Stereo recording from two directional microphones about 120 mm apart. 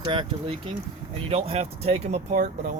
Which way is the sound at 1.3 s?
60° right (ahead or behind).